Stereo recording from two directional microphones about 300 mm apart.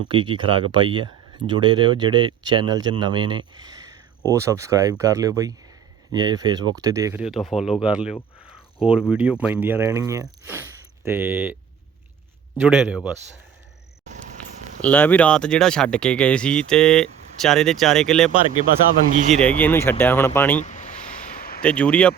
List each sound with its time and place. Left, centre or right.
0.1 s speech: centre
12.6 s speech: centre
14.8 s speech: centre
19.1 s speech: right
19.4 s speech: centre
20.6 s a sound: left
21.6 s speech: centre